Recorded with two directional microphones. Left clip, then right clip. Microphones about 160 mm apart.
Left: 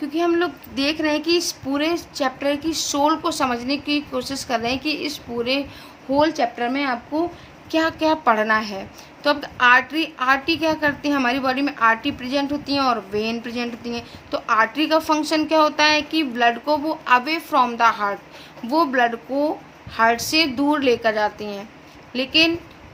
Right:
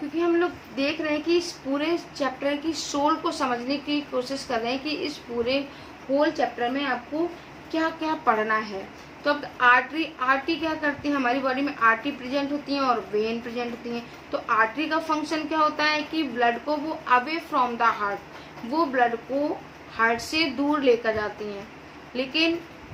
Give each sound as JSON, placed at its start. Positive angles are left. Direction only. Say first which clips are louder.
{"t": 0.2, "sound": "a woman's voice", "louder": "left 3 dB", "side_deg": 90}
{"t": 6.1, "sound": "a woman's voice", "louder": "left 4 dB", "side_deg": 65}
{"t": 7.7, "sound": "a woman's voice", "louder": "left 7 dB", "side_deg": 80}